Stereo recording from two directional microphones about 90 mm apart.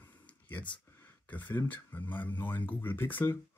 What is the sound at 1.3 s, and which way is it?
Speech, 20° left (ahead or behind).